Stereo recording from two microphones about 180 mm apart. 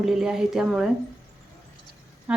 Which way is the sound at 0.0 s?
5° right (ahead or behind).